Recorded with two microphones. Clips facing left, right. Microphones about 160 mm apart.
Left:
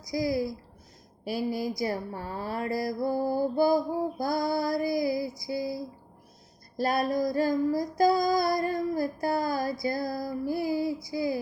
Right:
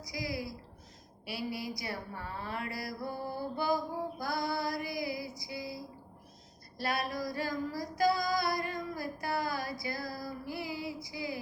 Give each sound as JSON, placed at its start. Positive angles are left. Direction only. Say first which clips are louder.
{"t": 0.0, "sound": "a woman's voice", "louder": "left 10 dB", "side_deg": 40}
{"t": 6.7, "sound": "child singing", "louder": "left 8 dB", "side_deg": 40}
{"t": 9.8, "sound": "a woman's voice", "louder": "left 9 dB", "side_deg": 45}